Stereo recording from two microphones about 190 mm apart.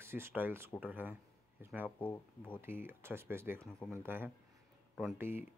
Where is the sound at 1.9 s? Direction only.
10° left (ahead or behind).